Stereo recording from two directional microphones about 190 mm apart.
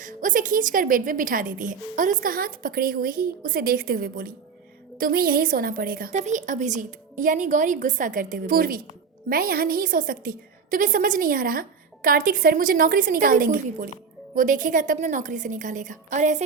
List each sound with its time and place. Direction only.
0.0 s a woman's voice: 45° right (ahead or behind)